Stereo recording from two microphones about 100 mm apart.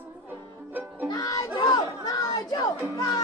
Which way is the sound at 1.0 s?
35° left (ahead or behind).